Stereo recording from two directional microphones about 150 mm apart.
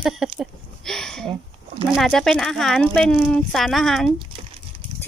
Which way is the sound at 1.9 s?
Centre (ahead or behind).